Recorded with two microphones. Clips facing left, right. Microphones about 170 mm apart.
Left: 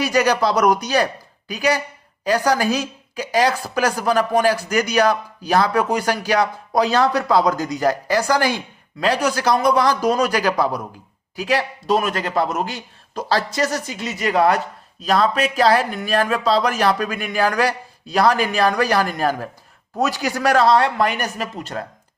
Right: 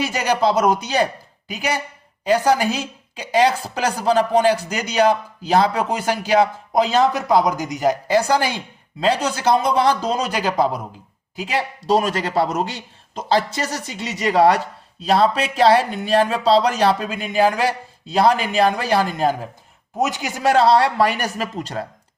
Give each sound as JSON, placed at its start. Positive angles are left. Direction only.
{"t": 0.0, "sound": "speech", "side_deg": -20}
{"t": 11.9, "sound": "speech", "side_deg": -35}
{"t": 12.7, "sound": "speech", "side_deg": -25}